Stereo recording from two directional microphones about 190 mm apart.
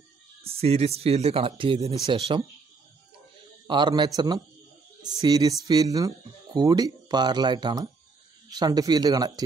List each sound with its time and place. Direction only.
0.4 s speech: 30° right (ahead or behind)
3.6 s speech: 25° right (ahead or behind)